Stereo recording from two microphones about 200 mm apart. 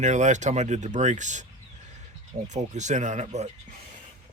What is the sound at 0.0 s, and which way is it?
Speech, 35° right (ahead or behind).